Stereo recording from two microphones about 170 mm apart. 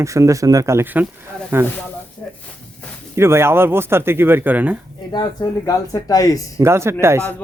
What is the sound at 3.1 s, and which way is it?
Speech, 15° right (ahead or behind).